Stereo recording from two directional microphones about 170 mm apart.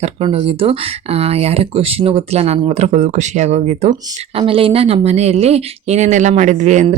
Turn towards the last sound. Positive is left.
turn(degrees=-45)  # may be behind; listen again after turning